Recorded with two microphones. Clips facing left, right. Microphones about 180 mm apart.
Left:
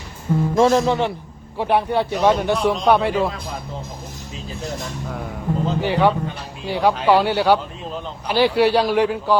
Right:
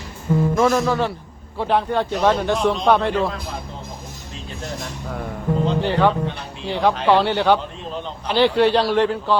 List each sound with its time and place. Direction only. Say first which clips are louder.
0.5 s speech: left 4 dB; 25° left (ahead or behind)
2.3 s speech: even; centre (ahead or behind)
4.8 s speech: even; centre (ahead or behind)